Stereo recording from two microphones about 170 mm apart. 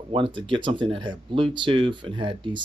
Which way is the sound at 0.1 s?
30° right (ahead or behind).